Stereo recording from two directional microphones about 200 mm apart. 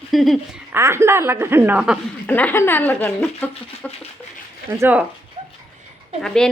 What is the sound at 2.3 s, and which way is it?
Speech, 10° left (ahead or behind).